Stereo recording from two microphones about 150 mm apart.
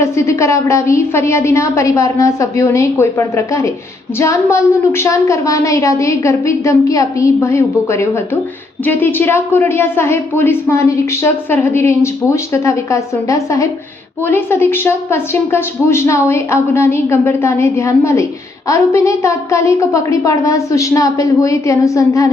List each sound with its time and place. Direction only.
0.0 s a woman's voice: 20° left (ahead or behind)